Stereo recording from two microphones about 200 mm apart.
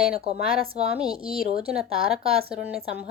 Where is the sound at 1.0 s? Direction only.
25° right (ahead or behind).